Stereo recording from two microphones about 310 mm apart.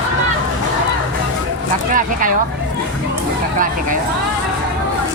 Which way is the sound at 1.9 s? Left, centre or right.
Right.